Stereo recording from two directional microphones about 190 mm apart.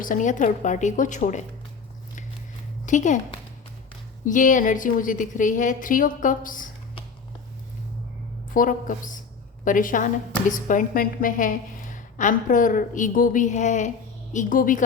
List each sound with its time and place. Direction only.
0.0 s a woman's voice: 45° left (ahead or behind)
2.8 s speech: 40° left (ahead or behind)
4.3 s a woman's voice: 45° left (ahead or behind)
8.5 s a woman's voice: 45° left (ahead or behind)